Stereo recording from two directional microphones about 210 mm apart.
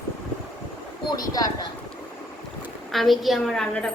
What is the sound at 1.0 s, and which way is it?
Speech, 20° left (ahead or behind).